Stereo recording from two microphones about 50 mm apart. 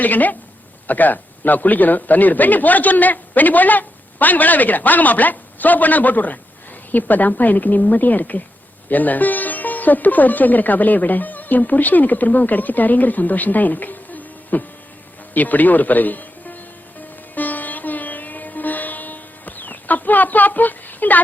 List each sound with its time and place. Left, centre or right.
0.0 s a man's voice: left
17.0 s music: left